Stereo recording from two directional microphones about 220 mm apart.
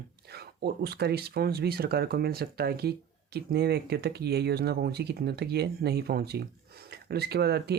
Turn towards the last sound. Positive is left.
turn(degrees=-45)  # may be behind; listen again after turning